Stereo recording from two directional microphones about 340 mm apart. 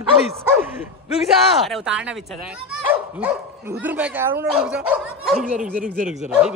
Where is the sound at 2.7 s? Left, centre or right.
Centre.